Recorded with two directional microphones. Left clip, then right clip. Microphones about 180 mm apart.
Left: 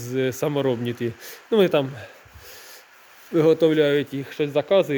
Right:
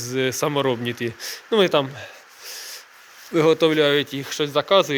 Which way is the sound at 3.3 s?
20° left (ahead or behind).